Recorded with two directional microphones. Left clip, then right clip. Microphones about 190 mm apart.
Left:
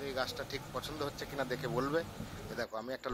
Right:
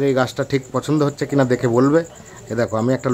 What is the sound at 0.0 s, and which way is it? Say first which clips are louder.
Speech: right 19 dB; 35° left (ahead or behind).